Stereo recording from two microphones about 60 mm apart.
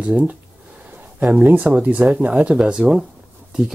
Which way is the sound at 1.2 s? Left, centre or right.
Right.